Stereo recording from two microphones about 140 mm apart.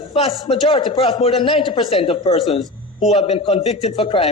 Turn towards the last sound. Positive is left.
turn(degrees=40)  # may be behind; listen again after turning